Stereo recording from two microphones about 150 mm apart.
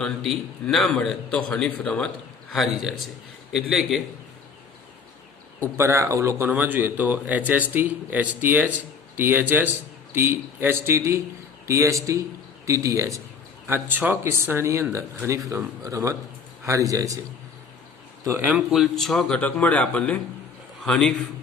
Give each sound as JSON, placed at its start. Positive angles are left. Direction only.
{"t": 0.0, "sound": "a man's voice", "side_deg": 0}
{"t": 5.7, "sound": "speech", "side_deg": -20}
{"t": 18.3, "sound": "a man's voice", "side_deg": -10}